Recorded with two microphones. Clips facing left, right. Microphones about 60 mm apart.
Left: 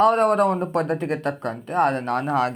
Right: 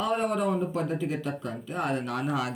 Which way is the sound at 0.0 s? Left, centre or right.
Left.